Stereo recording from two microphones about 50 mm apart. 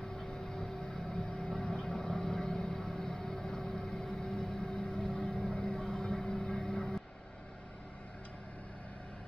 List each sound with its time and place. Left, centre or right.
0.2 s vehicle: centre
5.8 s music: centre